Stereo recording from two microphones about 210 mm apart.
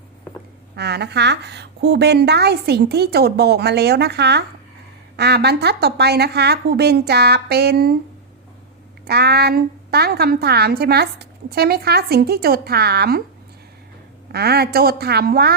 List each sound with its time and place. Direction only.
0.8 s a woman's voice: 50° right (ahead or behind)
9.0 s a woman's voice: 50° right (ahead or behind)
14.3 s a woman's voice: 50° right (ahead or behind)